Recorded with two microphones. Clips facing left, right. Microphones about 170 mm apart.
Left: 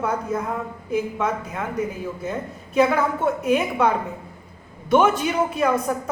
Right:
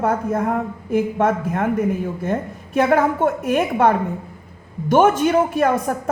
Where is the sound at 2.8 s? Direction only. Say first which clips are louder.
Right 3 dB; 55° right (ahead or behind).